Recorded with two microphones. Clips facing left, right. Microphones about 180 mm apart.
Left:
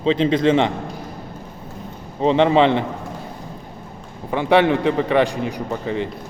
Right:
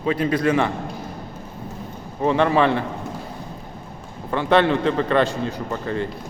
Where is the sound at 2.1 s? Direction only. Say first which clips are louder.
Left 3 dB; 20° left (ahead or behind).